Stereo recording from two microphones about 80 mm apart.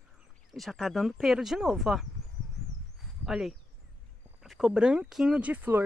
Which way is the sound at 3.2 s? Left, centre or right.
Centre.